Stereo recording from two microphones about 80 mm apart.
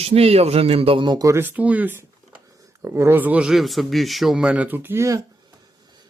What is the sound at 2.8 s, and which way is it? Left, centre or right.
Speech, right.